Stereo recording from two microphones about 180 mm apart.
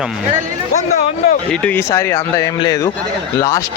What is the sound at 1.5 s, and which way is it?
A man's voice, 10° left (ahead or behind).